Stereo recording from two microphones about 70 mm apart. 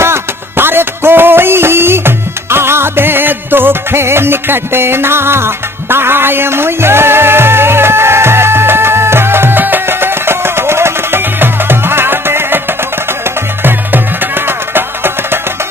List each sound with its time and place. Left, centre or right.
0.0 s music: right